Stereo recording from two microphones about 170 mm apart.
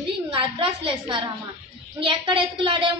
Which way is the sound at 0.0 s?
30° right (ahead or behind).